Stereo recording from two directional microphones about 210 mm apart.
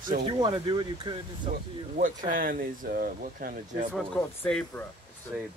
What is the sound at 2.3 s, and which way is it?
Speech, 40° right (ahead or behind).